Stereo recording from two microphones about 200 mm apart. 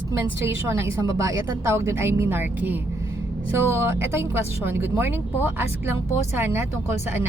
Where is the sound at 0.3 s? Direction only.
15° right (ahead or behind).